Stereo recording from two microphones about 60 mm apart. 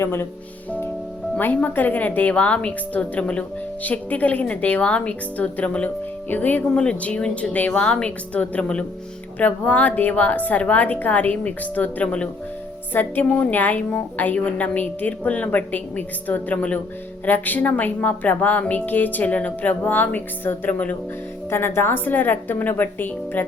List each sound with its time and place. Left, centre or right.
0.0 s speech: left
1.4 s a woman's voice: left
6.7 s a woman's voice: centre
12.9 s a woman's voice: left
21.5 s speech: left